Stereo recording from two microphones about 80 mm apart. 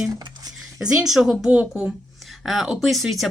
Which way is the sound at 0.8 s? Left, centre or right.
Centre.